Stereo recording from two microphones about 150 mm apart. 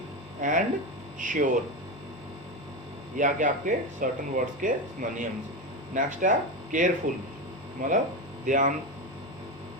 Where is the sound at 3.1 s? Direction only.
60° right (ahead or behind).